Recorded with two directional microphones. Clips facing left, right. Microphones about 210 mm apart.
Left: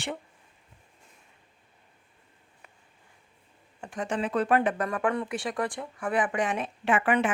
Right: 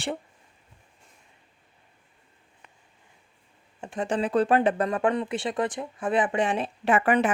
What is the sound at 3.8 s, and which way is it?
Speech, 25° right (ahead or behind).